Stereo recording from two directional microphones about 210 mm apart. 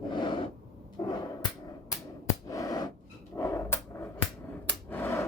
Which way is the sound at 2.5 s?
15° left (ahead or behind).